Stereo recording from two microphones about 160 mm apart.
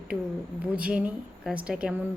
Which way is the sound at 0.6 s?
10° right (ahead or behind).